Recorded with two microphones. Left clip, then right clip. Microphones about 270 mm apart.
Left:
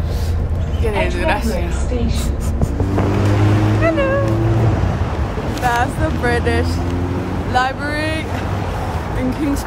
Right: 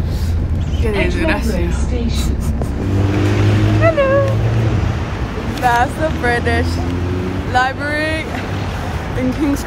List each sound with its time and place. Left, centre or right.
0.8 s speech: centre
3.8 s cat: centre
5.7 s speech: centre